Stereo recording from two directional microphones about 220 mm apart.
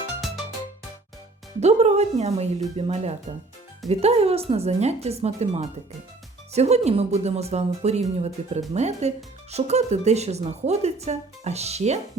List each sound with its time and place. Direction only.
1.6 s speech: 30° right (ahead or behind)